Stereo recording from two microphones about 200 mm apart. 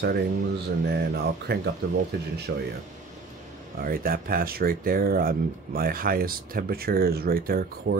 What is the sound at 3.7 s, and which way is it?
Speech, 45° right (ahead or behind).